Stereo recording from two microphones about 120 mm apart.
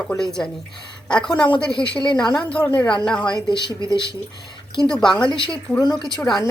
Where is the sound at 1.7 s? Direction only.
45° left (ahead or behind).